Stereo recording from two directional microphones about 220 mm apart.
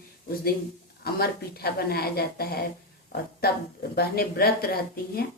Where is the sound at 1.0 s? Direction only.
45° left (ahead or behind).